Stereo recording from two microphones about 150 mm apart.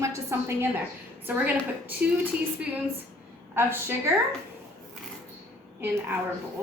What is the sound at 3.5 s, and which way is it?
Speech, 15° right (ahead or behind).